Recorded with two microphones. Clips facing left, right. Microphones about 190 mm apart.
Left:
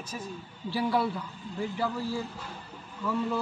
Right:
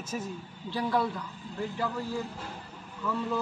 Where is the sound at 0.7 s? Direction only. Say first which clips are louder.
Left 1 dB; 10° left (ahead or behind).